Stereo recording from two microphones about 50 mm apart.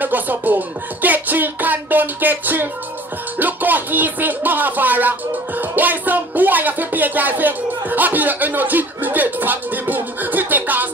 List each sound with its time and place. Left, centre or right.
0.0 s music: right